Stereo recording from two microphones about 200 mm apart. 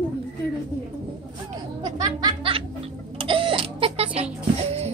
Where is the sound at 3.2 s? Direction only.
25° right (ahead or behind).